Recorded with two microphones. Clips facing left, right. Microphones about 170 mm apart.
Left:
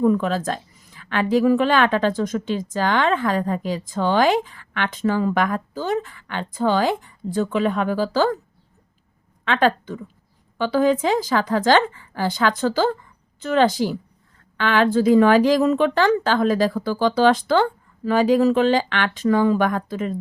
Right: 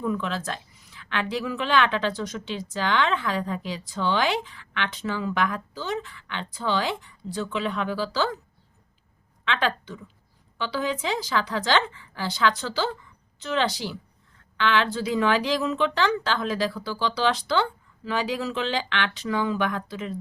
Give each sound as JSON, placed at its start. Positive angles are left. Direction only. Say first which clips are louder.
{"t": 0.0, "sound": "a woman's voice", "louder": "left 9 dB", "side_deg": 45}
{"t": 9.4, "sound": "a woman's voice", "louder": "left 7 dB", "side_deg": 45}